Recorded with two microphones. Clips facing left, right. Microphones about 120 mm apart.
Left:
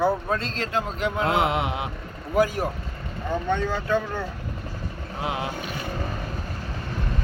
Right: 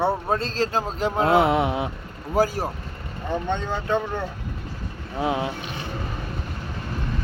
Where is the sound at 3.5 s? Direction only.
20° right (ahead or behind).